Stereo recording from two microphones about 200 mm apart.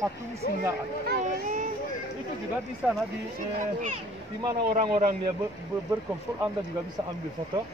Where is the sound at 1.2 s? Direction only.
40° right (ahead or behind).